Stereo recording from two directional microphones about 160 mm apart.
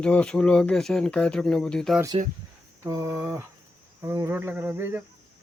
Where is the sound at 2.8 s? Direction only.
20° right (ahead or behind).